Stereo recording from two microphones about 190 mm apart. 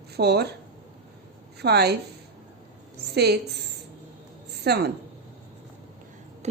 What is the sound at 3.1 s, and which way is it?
Speech, 60° right (ahead or behind).